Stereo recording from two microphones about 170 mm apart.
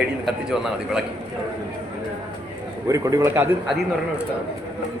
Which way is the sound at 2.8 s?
20° right (ahead or behind).